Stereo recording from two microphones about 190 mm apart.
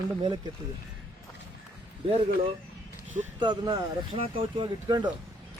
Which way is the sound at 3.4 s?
20° right (ahead or behind).